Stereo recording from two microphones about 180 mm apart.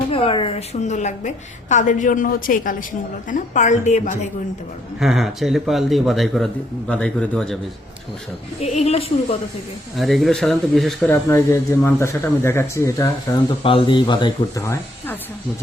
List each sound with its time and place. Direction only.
0.1 s a woman's voice: 30° left (ahead or behind)
4.9 s a man's voice: centre (ahead or behind)
8.6 s a woman's voice: 35° left (ahead or behind)
10.0 s a man's voice: centre (ahead or behind)
11.0 s speech: 15° left (ahead or behind)
13.6 s speech: 30° left (ahead or behind)
14.6 s speech: 10° left (ahead or behind)